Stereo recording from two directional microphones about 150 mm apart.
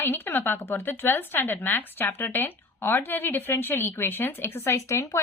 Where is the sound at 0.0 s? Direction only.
15° left (ahead or behind).